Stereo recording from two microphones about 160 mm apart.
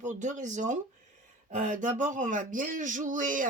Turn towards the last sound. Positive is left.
turn(degrees=-55)  # may be behind; listen again after turning